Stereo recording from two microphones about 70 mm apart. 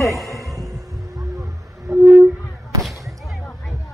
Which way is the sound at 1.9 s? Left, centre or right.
Right.